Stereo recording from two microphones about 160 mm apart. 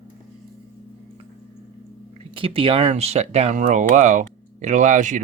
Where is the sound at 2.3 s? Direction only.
35° right (ahead or behind).